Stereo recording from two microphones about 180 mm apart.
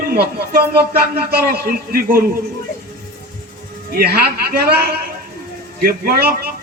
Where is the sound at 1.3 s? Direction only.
60° right (ahead or behind).